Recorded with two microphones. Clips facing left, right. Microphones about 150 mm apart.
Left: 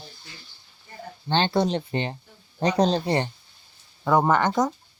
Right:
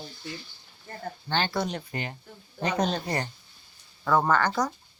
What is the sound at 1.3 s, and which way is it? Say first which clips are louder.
Speech: left 6 dB; 25° left (ahead or behind).